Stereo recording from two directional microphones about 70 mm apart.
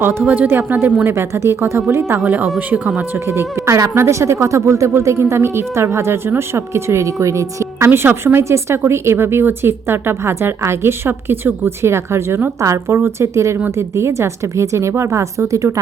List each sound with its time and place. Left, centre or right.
0.0 s speech: right
1.1 s speech: right
3.2 s a woman's voice: right
7.9 s a woman's voice: right